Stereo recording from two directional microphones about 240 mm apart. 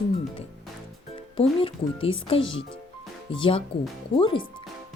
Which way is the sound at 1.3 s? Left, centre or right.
Left.